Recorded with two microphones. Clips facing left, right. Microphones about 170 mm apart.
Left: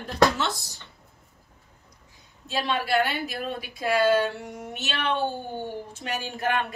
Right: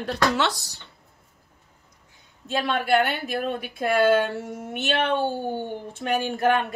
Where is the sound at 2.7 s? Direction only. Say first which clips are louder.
Right 3 dB; 55° right (ahead or behind).